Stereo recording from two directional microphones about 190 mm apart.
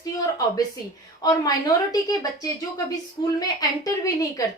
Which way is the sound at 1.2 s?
20° left (ahead or behind).